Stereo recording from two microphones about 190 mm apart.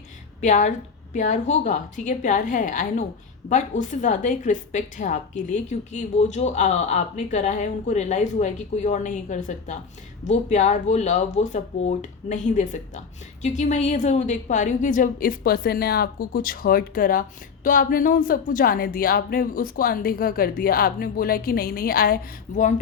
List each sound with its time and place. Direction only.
0.4 s a woman's voice: 40° left (ahead or behind)